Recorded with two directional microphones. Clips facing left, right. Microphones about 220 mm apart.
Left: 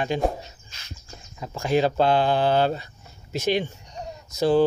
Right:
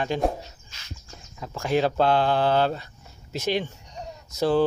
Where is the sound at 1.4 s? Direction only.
10° left (ahead or behind).